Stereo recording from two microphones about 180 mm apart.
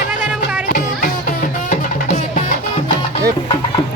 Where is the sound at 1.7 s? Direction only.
45° left (ahead or behind).